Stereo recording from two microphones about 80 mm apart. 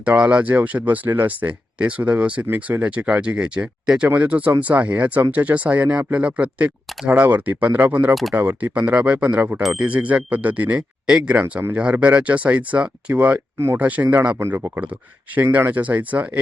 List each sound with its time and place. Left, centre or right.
0.0 s speech: centre; by 14.7 s right
15.5 s speech: right